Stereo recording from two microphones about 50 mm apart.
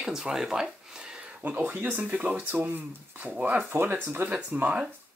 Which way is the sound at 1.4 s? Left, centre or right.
Right.